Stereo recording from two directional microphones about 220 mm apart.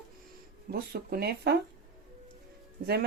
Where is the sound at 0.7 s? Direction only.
45° right (ahead or behind).